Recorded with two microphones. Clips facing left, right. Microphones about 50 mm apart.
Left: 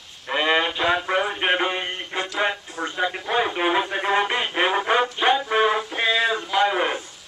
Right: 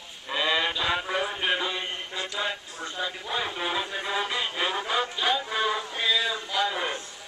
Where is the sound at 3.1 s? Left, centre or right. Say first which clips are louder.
Left 8 dB; left.